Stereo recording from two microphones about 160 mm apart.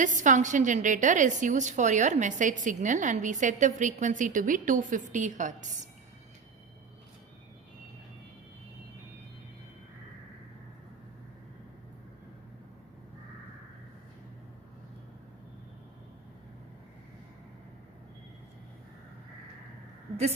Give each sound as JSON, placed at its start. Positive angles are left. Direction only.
{"t": 0.0, "sound": "a woman's voice", "side_deg": -50}